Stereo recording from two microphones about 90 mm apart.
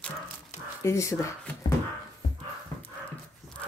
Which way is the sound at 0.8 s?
35° left (ahead or behind).